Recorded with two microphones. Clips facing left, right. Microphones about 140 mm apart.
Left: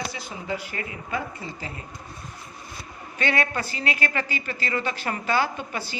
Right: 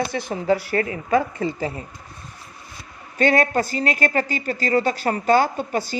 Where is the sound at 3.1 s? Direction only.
40° right (ahead or behind).